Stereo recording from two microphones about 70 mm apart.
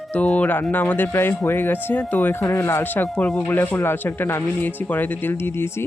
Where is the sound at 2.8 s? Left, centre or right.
Left.